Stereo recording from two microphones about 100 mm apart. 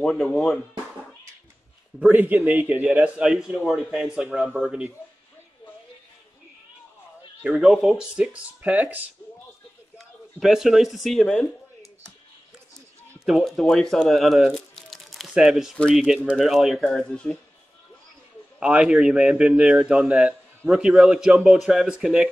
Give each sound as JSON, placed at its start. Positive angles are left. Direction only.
{"t": 0.0, "sound": "speech", "side_deg": 10}
{"t": 2.0, "sound": "a man's voice", "side_deg": -15}
{"t": 7.6, "sound": "a man's voice", "side_deg": 0}
{"t": 9.9, "sound": "speech", "side_deg": -5}
{"t": 13.2, "sound": "speech", "side_deg": 0}
{"t": 18.6, "sound": "a man's voice", "side_deg": -10}